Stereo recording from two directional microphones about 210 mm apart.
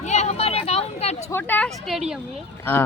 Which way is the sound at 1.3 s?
10° left (ahead or behind).